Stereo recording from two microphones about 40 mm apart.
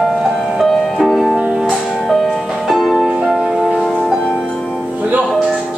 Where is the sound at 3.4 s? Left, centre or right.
Centre.